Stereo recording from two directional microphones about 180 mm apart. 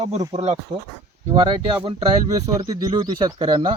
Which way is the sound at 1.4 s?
30° right (ahead or behind).